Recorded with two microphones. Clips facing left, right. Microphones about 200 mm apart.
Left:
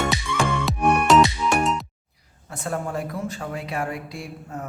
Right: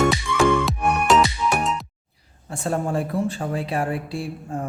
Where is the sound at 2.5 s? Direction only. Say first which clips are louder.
Right 4 dB; 30° right (ahead or behind).